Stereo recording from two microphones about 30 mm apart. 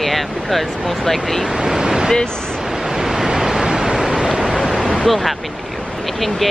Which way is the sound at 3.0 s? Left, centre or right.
Centre.